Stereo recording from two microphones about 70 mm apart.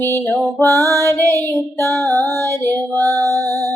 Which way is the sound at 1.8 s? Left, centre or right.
Left.